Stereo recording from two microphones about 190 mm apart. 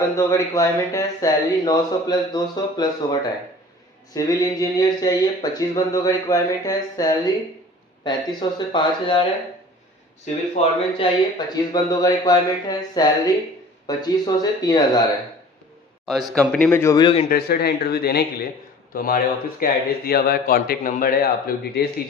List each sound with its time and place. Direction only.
0.2 s speech: 15° left (ahead or behind)
10.6 s speech: 30° left (ahead or behind)
16.3 s speech: 5° left (ahead or behind); by 17.2 s 25° left (ahead or behind)
17.2 s a man's voice: 55° left (ahead or behind)